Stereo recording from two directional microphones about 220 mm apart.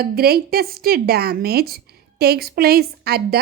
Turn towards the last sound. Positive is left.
turn(degrees=-45)  # may be behind; listen again after turning